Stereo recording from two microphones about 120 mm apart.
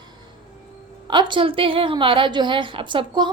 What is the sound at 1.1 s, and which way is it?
A woman's voice, 40° right (ahead or behind).